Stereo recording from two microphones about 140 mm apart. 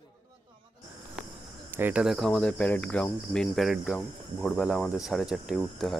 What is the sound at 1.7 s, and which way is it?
Speech, 15° right (ahead or behind).